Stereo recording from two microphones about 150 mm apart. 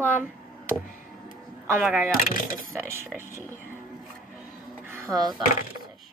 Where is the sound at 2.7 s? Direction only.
15° right (ahead or behind).